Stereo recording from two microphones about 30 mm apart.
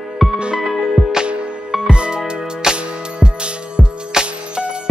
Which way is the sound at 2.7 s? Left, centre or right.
Right.